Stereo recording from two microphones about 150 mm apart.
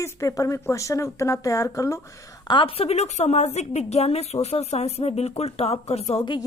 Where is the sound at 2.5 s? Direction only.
35° left (ahead or behind).